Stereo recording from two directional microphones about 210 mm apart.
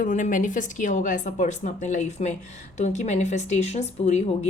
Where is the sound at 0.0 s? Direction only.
35° left (ahead or behind).